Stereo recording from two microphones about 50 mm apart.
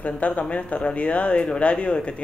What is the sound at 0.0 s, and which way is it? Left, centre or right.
Speech, left.